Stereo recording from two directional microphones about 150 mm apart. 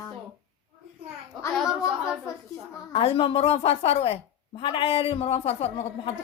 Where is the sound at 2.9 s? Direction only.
35° left (ahead or behind).